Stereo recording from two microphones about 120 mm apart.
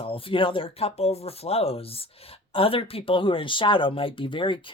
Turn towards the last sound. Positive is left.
turn(degrees=45)  # may be behind; listen again after turning